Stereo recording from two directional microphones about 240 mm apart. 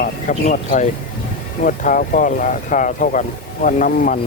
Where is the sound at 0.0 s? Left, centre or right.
Left.